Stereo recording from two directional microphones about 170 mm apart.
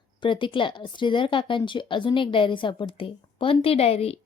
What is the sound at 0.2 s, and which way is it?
A woman's voice, 30° left (ahead or behind).